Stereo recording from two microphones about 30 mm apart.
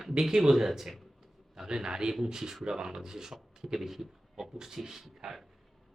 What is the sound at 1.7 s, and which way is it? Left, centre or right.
A man's voice, right.